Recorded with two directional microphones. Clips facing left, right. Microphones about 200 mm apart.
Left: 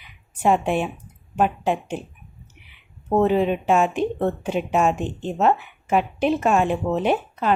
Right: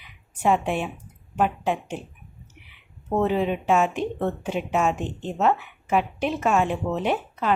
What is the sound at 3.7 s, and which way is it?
Speech, 35° left (ahead or behind).